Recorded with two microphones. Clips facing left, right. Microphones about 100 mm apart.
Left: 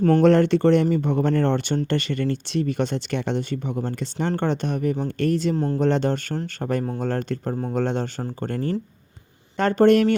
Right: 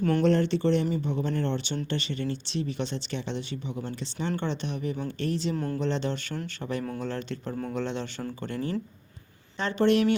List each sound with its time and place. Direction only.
0.2 s speech: 60° left (ahead or behind)
5.5 s speech: 30° left (ahead or behind)
5.8 s speech: 50° left (ahead or behind)